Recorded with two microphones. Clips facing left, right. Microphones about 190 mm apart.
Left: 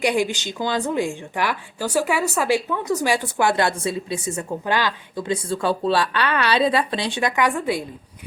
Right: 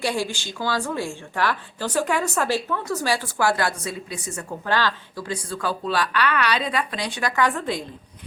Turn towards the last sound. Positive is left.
turn(degrees=10)  # may be behind; listen again after turning